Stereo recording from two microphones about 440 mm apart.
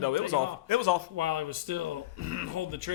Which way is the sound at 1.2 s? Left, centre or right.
Right.